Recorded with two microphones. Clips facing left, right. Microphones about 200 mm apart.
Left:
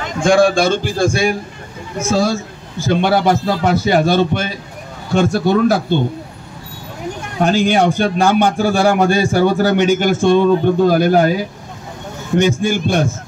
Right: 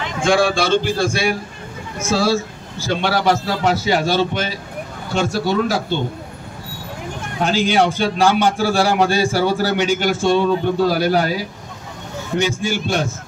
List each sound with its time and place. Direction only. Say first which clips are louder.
0.0 s a man's voice: left 4 dB; 45° left (ahead or behind)
2.8 s a man's voice: left 5 dB; 50° left (ahead or behind)
7.4 s a man's voice: left 3 dB; 50° left (ahead or behind)
12.4 s a man's voice: left 5 dB; 50° left (ahead or behind)